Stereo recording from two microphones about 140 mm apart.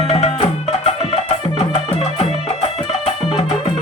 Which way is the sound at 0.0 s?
45° left (ahead or behind).